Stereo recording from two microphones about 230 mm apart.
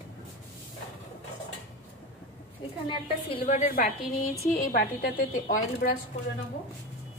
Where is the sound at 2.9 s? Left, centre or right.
Left.